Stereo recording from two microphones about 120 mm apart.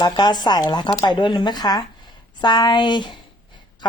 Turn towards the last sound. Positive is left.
turn(degrees=40)  # may be behind; listen again after turning